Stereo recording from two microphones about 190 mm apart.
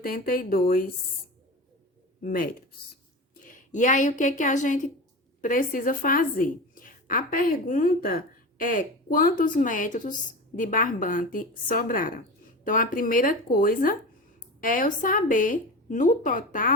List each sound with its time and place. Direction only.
0.0 s a woman's voice: 50° left (ahead or behind)
2.2 s a woman's voice: 45° left (ahead or behind)